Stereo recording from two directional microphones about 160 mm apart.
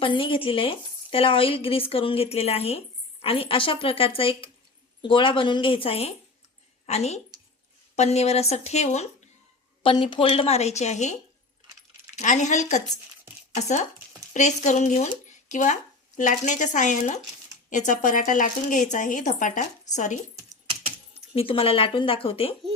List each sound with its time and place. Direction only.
0.0 s a woman's voice: 30° left (ahead or behind)
9.8 s speech: 30° left (ahead or behind); by 20.1 s 50° left (ahead or behind)
21.1 s speech: 35° left (ahead or behind)